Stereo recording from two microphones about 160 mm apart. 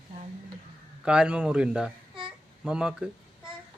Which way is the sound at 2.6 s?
5° right (ahead or behind).